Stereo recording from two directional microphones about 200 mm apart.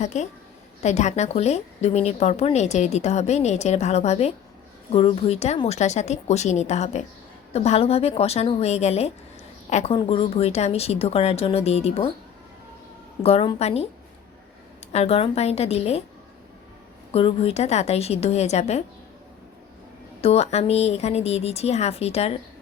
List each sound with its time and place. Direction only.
0.0 s a woman's voice: 35° left (ahead or behind)
13.2 s a woman's voice: 30° left (ahead or behind)
14.9 s a woman's voice: 30° left (ahead or behind)
17.1 s a woman's voice: 30° left (ahead or behind)
20.2 s a woman's voice: 30° left (ahead or behind)